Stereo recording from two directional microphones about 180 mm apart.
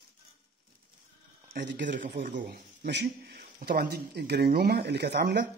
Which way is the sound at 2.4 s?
65° right (ahead or behind).